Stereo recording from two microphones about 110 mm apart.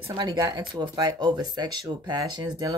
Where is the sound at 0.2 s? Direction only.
35° right (ahead or behind).